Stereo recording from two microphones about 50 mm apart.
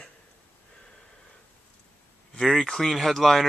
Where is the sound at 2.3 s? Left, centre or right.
Centre.